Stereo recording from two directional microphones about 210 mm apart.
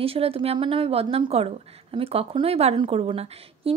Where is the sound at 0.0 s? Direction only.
25° right (ahead or behind).